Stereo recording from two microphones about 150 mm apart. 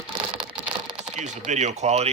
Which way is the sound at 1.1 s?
50° right (ahead or behind).